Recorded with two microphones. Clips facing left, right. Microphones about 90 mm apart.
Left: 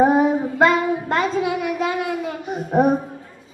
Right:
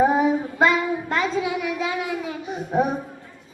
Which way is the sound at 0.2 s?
45° left (ahead or behind).